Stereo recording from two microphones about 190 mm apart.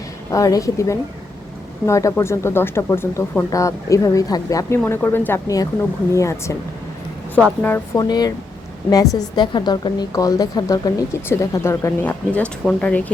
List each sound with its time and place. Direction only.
0.3 s speech: 15° left (ahead or behind)
7.9 s a woman's voice: 20° left (ahead or behind)